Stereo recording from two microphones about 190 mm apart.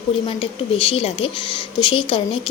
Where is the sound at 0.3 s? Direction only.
30° left (ahead or behind).